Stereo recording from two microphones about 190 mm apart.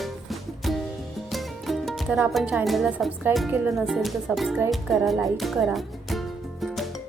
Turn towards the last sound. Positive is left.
turn(degrees=0)  # may be behind; listen again after turning